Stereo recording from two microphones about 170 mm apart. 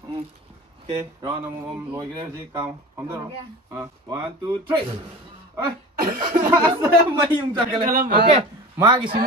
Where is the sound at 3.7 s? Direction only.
20° right (ahead or behind).